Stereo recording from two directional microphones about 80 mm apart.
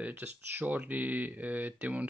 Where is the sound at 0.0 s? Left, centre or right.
Right.